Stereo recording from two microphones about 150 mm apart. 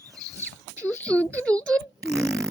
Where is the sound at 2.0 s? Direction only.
Centre (ahead or behind).